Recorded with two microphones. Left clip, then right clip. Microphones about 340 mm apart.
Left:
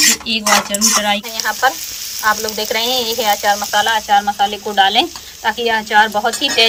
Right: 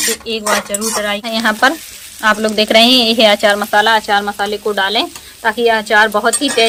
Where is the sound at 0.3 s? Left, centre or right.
Centre.